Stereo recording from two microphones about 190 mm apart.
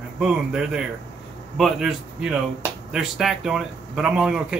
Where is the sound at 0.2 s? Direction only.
5° right (ahead or behind).